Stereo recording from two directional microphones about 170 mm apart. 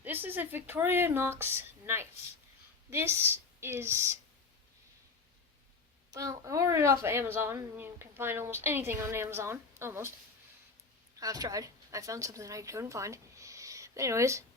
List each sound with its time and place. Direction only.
0.0 s a woman's voice: 10° right (ahead or behind)
6.1 s a woman's voice: 20° right (ahead or behind)
11.2 s speech: 20° right (ahead or behind)